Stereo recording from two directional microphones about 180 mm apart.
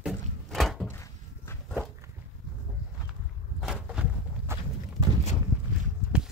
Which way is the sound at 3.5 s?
5° right (ahead or behind).